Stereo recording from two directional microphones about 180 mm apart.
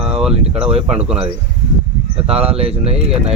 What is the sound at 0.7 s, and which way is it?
Speech, 35° right (ahead or behind).